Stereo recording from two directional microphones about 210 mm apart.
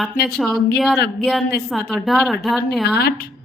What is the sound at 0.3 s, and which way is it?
Speech, centre (ahead or behind).